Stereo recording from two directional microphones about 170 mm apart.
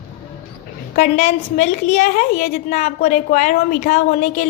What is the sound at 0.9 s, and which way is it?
A woman's voice, 40° left (ahead or behind).